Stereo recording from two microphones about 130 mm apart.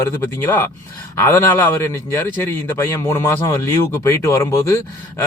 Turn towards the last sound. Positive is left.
turn(degrees=20)  # may be behind; listen again after turning